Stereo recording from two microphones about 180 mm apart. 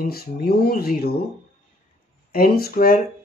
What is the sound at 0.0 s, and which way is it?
Speech, 55° left (ahead or behind).